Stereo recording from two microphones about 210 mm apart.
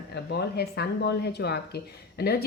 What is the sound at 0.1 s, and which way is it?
Speech, 50° left (ahead or behind).